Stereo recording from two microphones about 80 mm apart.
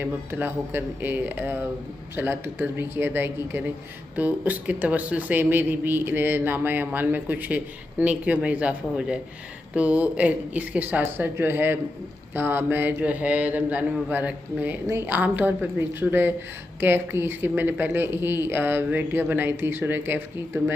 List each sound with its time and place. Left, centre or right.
0.0 s speech: right